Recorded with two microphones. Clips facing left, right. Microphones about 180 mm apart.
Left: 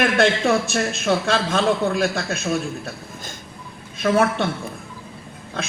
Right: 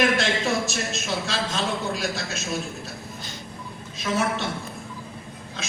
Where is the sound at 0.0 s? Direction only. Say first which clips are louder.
Left 4 dB; 55° left (ahead or behind).